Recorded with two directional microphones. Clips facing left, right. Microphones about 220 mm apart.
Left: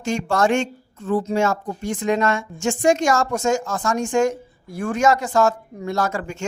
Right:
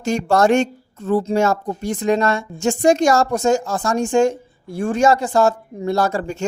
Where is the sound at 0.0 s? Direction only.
40° right (ahead or behind).